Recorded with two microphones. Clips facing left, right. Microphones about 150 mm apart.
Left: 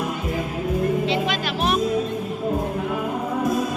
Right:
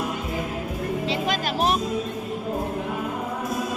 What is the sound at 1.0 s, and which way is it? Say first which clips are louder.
Music: left 2 dB; 35° right (ahead or behind).